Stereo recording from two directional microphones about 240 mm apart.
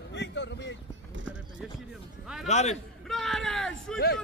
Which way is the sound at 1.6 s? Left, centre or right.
Centre.